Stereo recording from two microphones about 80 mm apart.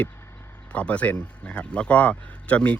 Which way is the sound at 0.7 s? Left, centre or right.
Centre.